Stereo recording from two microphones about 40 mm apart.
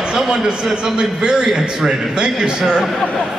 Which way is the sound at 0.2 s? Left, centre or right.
Centre.